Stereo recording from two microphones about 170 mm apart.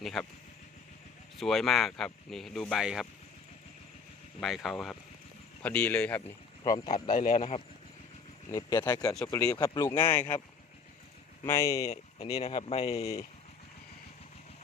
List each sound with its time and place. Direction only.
0.0 s speech: centre (ahead or behind)
1.4 s speech: centre (ahead or behind)
4.4 s speech: centre (ahead or behind)
6.8 s speech: 50° left (ahead or behind)
8.4 s speech: 25° left (ahead or behind)
11.4 s speech: 15° left (ahead or behind)
12.4 s speech: 35° left (ahead or behind)
13.0 s speech: 20° left (ahead or behind)